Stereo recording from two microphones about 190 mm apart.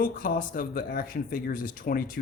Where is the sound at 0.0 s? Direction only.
45° left (ahead or behind).